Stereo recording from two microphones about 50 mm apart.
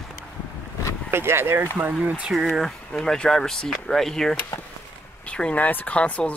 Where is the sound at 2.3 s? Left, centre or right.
Centre.